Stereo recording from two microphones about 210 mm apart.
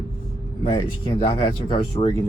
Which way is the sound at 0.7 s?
20° left (ahead or behind).